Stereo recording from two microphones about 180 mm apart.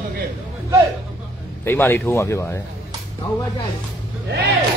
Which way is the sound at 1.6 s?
15° left (ahead or behind).